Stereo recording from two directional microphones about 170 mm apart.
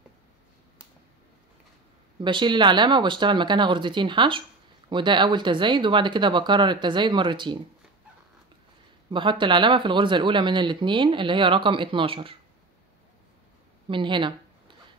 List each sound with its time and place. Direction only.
2.1 s speech: 30° right (ahead or behind)
9.1 s speech: 30° right (ahead or behind)
13.8 s speech: 30° right (ahead or behind)